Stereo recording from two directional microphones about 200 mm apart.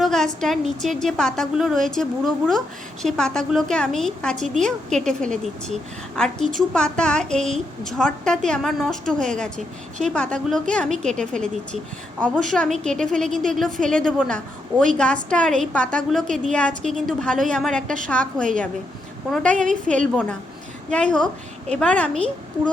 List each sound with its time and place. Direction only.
0.0 s a woman's voice: centre (ahead or behind)
19.6 s a woman's voice: 40° right (ahead or behind)
20.9 s a woman's voice: 5° left (ahead or behind)